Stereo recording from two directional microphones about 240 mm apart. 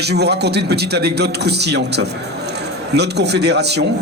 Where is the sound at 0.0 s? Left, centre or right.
Right.